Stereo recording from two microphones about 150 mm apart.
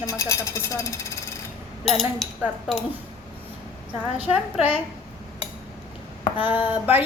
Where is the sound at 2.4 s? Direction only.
5° right (ahead or behind).